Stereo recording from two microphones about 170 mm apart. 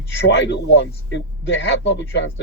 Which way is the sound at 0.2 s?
90° left.